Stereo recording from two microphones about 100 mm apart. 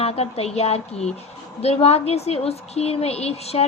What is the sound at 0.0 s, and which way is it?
A woman's voice, 90° left.